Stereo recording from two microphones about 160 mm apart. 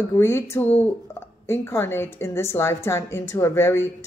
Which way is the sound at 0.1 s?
15° left (ahead or behind).